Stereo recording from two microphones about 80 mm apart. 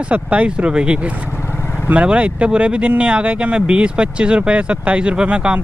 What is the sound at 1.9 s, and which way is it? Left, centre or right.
Speech, centre.